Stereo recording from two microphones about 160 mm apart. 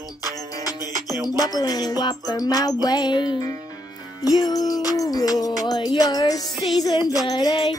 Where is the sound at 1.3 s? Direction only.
25° left (ahead or behind).